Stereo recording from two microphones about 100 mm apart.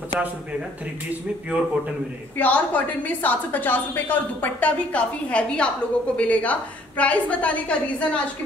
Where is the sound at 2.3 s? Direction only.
15° left (ahead or behind).